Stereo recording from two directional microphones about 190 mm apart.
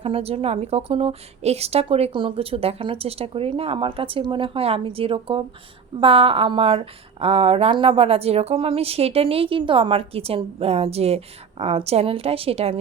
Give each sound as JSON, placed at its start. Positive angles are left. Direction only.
{"t": 0.0, "sound": "speech", "side_deg": -30}